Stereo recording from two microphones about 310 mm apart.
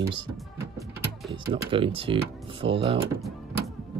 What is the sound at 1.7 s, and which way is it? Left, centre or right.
Speech, centre.